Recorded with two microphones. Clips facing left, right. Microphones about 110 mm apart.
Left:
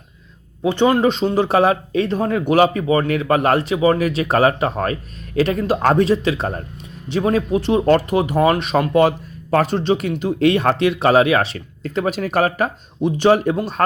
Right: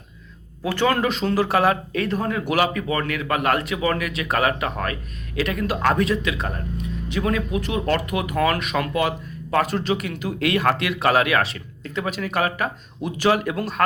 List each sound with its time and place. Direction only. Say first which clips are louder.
0.6 s speech: left 6 dB; 20° left (ahead or behind)